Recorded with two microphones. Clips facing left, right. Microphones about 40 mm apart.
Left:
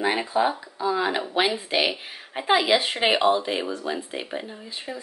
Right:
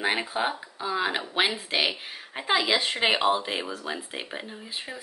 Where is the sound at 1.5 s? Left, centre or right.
Centre.